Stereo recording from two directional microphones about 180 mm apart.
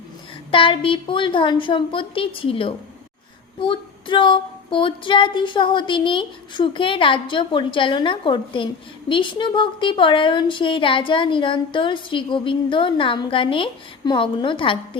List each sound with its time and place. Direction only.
0.5 s female singing: 30° left (ahead or behind)